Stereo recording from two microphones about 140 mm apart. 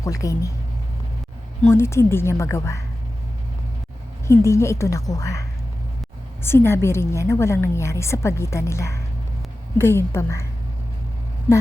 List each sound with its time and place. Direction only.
0.0 s a woman's voice: 25° left (ahead or behind)
1.7 s a woman's voice: 20° left (ahead or behind)
4.3 s a woman's voice: 20° left (ahead or behind)
6.4 s a woman's voice: 15° left (ahead or behind)